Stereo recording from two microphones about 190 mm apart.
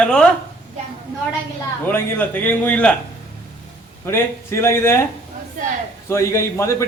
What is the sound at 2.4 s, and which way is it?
Speech, 10° left (ahead or behind).